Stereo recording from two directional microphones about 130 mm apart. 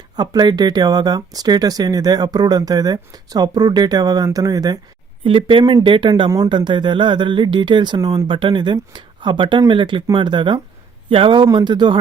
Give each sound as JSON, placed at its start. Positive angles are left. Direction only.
{"t": 0.2, "sound": "speech", "side_deg": -30}
{"t": 5.2, "sound": "speech", "side_deg": -40}